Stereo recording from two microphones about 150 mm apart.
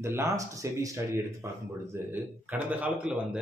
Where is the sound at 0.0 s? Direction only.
20° right (ahead or behind).